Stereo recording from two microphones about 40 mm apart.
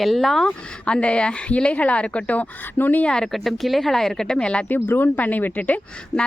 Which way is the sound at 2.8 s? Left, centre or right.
Left.